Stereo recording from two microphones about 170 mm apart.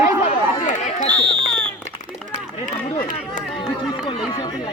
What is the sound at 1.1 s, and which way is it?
Speech, 5° left (ahead or behind).